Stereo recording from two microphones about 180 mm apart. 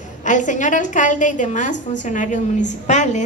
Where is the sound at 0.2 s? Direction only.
45° left (ahead or behind).